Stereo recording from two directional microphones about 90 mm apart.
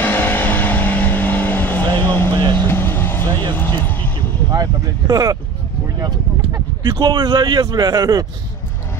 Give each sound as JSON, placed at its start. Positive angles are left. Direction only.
{"t": 0.0, "sound": "vehicle", "side_deg": 20}
{"t": 3.5, "sound": "music", "side_deg": 25}
{"t": 4.5, "sound": "speech", "side_deg": -45}